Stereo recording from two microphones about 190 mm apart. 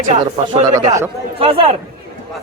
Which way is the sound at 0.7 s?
15° right (ahead or behind).